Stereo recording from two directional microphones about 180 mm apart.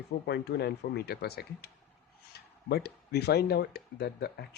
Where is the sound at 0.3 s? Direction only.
65° left (ahead or behind).